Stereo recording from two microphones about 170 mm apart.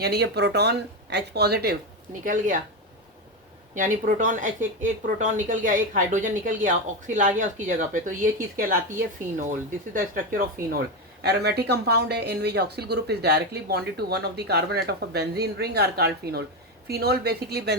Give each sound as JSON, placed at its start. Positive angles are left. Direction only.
{"t": 0.0, "sound": "speech", "side_deg": -75}
{"t": 2.2, "sound": "speech", "side_deg": -50}
{"t": 3.8, "sound": "speech", "side_deg": -50}
{"t": 11.2, "sound": "speech", "side_deg": -75}